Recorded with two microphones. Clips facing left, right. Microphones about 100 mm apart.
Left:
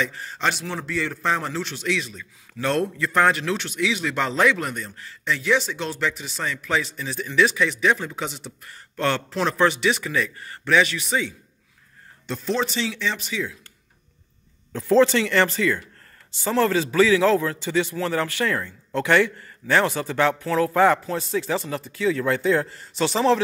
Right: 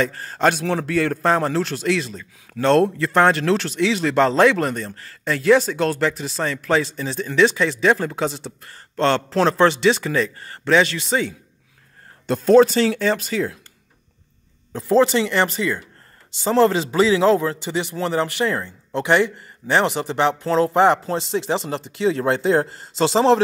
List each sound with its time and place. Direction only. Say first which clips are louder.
0.0 s a man's voice: right 6 dB; 45° right (ahead or behind)
2.5 s speech: right 7 dB; 50° right (ahead or behind)
3.0 s speech: right 3 dB; 30° right (ahead or behind)
12.3 s a man's voice: right 12 dB; 50° right (ahead or behind)
14.7 s a man's voice: right 1 dB; 15° right (ahead or behind)